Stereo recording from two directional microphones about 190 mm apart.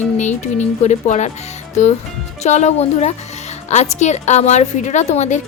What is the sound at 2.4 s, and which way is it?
A woman's voice, 35° left (ahead or behind).